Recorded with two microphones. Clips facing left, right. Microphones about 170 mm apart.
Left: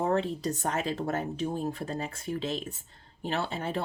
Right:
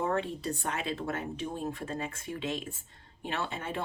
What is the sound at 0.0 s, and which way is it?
Speech, 35° left (ahead or behind).